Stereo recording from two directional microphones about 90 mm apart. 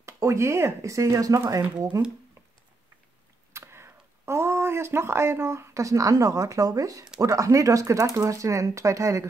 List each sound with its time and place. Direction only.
0.0 s speech: 35° right (ahead or behind)
3.5 s speech: 30° right (ahead or behind)